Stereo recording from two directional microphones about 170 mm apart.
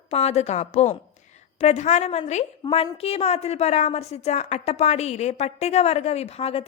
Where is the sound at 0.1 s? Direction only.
35° left (ahead or behind).